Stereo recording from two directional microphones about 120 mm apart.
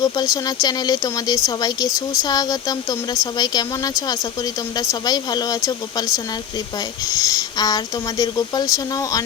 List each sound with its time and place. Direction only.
0.0 s speech: 30° left (ahead or behind)
7.1 s speech: 30° left (ahead or behind)